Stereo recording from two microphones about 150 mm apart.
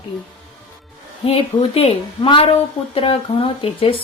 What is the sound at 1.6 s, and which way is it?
A woman's voice, 40° left (ahead or behind).